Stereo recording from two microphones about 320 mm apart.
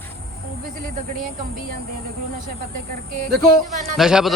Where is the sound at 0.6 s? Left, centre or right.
Right.